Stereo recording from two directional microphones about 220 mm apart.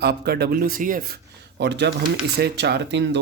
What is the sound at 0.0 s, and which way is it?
Speech, 45° right (ahead or behind).